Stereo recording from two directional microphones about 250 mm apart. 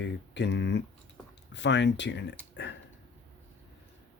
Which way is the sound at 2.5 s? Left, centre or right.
Left.